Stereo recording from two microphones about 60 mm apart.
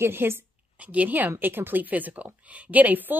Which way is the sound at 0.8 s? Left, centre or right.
Right.